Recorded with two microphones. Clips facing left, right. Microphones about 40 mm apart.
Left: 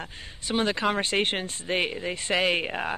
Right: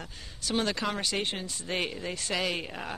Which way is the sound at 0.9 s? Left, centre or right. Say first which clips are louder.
Left 6 dB; left.